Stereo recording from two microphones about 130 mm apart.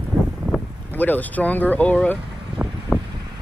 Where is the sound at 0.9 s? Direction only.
15° left (ahead or behind).